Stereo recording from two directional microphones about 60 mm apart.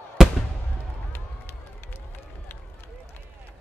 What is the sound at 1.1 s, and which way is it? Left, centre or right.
Run, left.